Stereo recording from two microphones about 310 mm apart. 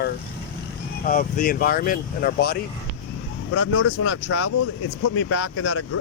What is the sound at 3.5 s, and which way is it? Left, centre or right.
Speech, left.